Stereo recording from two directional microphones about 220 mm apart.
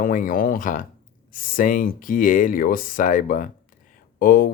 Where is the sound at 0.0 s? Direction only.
40° left (ahead or behind).